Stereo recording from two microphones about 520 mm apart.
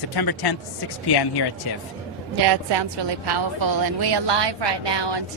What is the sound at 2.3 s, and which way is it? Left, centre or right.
A woman's voice, right.